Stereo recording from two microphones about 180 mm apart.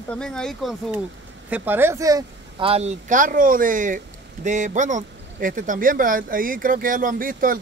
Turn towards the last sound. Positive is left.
turn(degrees=-50)  # may be behind; listen again after turning